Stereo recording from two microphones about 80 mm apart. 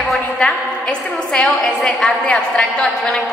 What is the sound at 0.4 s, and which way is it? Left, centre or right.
A man's voice, centre.